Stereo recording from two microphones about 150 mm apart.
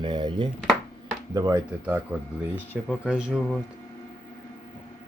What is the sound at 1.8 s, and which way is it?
Speech, 10° right (ahead or behind).